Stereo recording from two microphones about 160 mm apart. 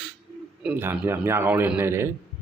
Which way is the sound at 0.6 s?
10° right (ahead or behind).